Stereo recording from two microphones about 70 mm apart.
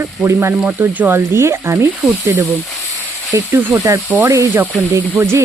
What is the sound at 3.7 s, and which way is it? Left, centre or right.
Speech, right.